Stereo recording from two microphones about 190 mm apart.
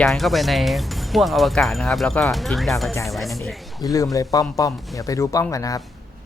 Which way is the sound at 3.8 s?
20° left (ahead or behind).